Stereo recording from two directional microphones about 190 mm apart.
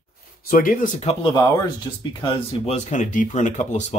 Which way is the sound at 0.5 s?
45° left (ahead or behind).